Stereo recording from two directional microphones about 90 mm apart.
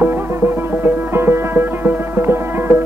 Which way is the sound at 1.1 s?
25° right (ahead or behind).